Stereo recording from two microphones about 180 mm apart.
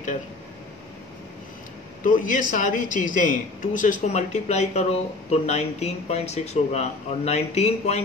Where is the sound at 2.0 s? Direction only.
45° left (ahead or behind).